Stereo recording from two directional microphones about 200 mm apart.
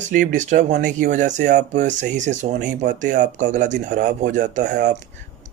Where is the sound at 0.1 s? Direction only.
40° right (ahead or behind).